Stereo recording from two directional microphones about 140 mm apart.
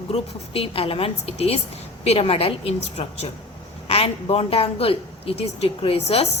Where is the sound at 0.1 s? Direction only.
45° left (ahead or behind).